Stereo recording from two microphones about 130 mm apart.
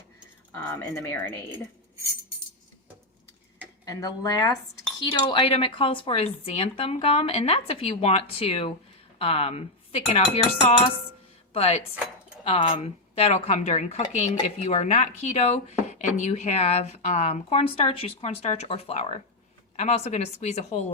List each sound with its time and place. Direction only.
0.5 s speech: 20° left (ahead or behind)
3.8 s speech: 25° left (ahead or behind)
4.9 s speech: 40° left (ahead or behind); by 20.9 s 60° left (ahead or behind)